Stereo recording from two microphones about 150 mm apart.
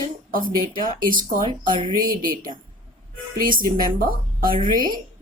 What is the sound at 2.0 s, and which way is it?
A woman's voice, 70° right (ahead or behind).